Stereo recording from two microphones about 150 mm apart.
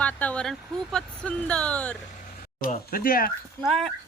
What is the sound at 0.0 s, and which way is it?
Speech, 10° left (ahead or behind).